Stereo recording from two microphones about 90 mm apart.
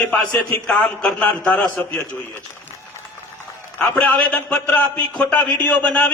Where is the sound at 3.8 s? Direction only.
15° left (ahead or behind).